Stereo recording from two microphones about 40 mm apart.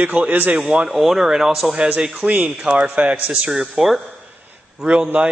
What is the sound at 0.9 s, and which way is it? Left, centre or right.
Speech, centre.